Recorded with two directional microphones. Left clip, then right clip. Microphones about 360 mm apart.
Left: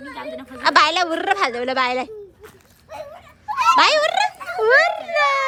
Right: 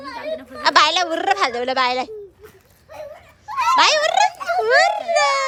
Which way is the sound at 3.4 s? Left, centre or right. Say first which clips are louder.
Left 1 dB; centre.